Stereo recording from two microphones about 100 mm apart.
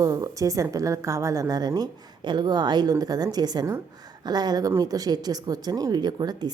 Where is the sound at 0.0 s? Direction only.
35° right (ahead or behind).